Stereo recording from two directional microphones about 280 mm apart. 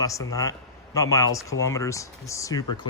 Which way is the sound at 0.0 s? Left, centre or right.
Centre.